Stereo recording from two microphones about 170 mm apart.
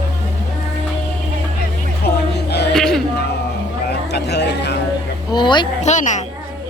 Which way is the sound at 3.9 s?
75° left (ahead or behind).